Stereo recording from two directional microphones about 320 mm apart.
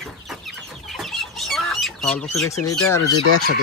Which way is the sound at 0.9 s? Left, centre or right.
Centre.